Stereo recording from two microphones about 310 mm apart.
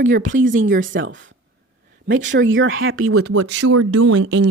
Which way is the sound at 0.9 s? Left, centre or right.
Right.